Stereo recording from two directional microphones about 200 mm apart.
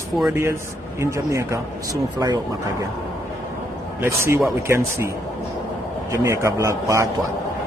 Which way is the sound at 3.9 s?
15° right (ahead or behind).